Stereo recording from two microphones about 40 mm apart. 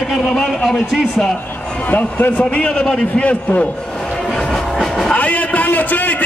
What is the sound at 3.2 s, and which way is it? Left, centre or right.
Speech, left.